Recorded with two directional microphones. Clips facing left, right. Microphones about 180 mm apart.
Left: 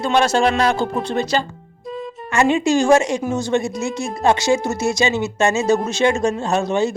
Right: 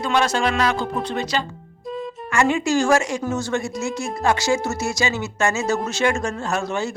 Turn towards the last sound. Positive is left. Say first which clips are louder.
# left 6 dB
turn(degrees=20)  # may be behind; listen again after turning